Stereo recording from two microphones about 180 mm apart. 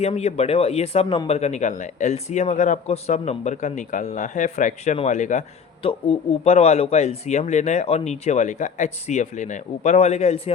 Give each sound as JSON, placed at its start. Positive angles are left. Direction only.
{"t": 0.0, "sound": "speech", "side_deg": 35}